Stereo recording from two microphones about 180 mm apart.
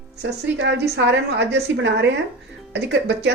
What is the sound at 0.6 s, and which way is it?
Speech, 75° right (ahead or behind).